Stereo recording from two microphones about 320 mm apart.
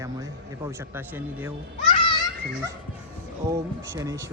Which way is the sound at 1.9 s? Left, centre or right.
Centre.